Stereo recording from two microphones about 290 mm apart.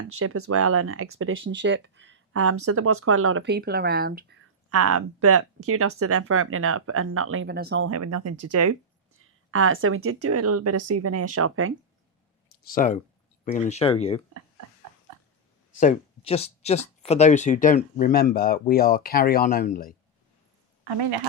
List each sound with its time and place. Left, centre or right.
0.1 s speech: right
4.7 s speech: right
7.9 s speech: right
12.6 s speech: left
15.8 s speech: left